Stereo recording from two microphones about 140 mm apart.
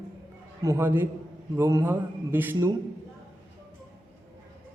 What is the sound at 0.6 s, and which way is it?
A man's voice, 20° right (ahead or behind).